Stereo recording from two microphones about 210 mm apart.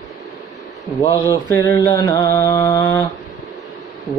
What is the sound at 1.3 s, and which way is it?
Mantra, 15° left (ahead or behind).